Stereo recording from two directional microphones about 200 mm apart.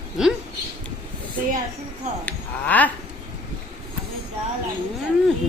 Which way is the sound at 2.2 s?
10° left (ahead or behind).